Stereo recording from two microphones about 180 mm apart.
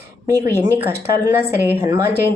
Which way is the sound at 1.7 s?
15° right (ahead or behind).